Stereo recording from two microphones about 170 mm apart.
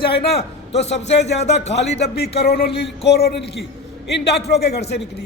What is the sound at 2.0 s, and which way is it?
A man's voice, 75° left (ahead or behind).